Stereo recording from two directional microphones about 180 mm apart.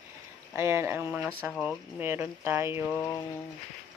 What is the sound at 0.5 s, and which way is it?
Speech, 15° right (ahead or behind).